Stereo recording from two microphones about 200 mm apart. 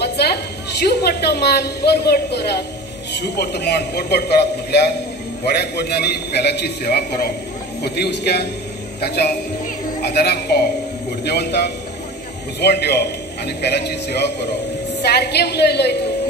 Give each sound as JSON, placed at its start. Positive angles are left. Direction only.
{"t": 0.0, "sound": "a woman's voice", "side_deg": 55}